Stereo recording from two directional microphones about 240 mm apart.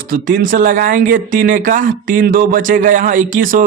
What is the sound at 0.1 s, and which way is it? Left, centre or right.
A man's voice, right.